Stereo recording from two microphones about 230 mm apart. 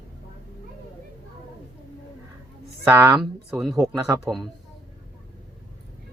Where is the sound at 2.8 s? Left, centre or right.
Centre.